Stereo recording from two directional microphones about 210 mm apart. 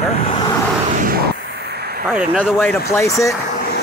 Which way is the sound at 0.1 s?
25° left (ahead or behind).